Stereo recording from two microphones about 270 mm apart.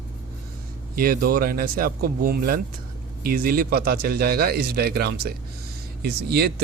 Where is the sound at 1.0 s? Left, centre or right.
Right.